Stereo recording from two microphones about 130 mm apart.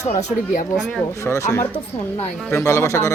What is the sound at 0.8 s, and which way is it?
Speech, 5° left (ahead or behind).